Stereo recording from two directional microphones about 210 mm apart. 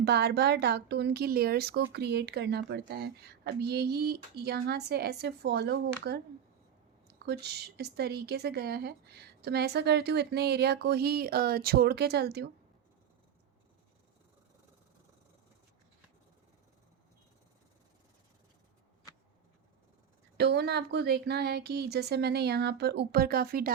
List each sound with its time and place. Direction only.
0.0 s speech: 50° right (ahead or behind)
20.3 s speech: 50° right (ahead or behind)